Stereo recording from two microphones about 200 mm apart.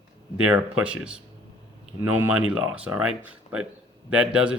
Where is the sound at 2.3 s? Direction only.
5° right (ahead or behind).